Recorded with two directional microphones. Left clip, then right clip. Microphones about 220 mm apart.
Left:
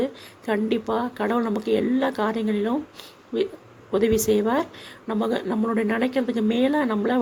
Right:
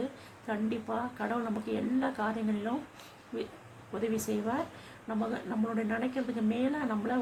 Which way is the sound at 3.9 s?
40° left (ahead or behind).